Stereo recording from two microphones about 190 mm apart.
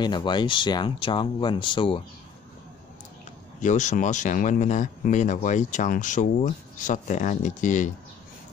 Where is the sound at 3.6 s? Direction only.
40° left (ahead or behind).